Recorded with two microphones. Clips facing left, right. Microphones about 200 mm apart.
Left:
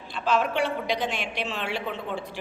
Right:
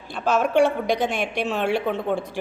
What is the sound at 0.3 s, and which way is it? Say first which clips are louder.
A woman's voice: right 6 dB; 45° right (ahead or behind).